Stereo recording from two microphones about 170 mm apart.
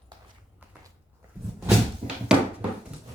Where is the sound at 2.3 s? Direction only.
5° right (ahead or behind).